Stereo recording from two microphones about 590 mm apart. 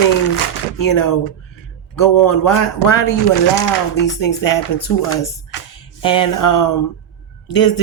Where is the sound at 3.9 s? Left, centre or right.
Left.